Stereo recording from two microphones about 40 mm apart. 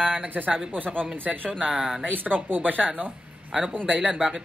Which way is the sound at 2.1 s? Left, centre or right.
Right.